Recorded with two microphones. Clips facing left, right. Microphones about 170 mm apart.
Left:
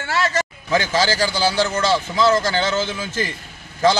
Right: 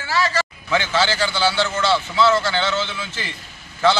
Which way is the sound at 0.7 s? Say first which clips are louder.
Left 1 dB; 40° left (ahead or behind).